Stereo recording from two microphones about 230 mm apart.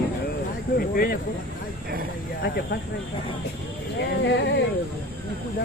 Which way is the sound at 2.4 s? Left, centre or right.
Left.